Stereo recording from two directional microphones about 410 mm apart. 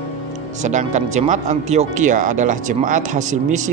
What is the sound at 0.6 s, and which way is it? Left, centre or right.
Speech, centre.